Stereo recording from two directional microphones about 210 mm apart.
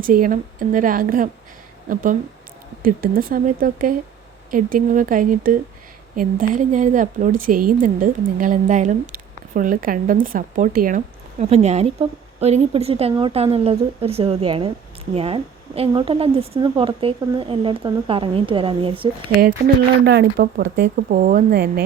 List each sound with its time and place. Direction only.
0.0 s a woman's voice: 40° right (ahead or behind); by 19.0 s 25° right (ahead or behind)
19.4 s speech: 45° right (ahead or behind)